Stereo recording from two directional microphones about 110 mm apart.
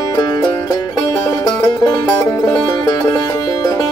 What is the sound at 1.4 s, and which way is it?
Music, 35° left (ahead or behind).